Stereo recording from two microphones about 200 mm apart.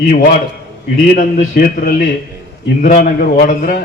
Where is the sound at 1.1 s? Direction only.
45° left (ahead or behind).